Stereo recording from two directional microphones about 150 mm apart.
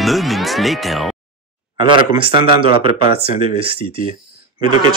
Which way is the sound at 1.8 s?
35° right (ahead or behind).